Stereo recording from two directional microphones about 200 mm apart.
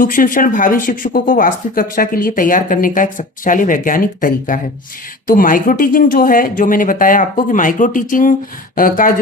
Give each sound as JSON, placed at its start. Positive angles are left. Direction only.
{"t": 0.0, "sound": "speech", "side_deg": 45}